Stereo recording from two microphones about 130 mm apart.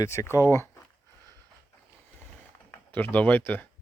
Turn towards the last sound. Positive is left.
turn(degrees=15)  # may be behind; listen again after turning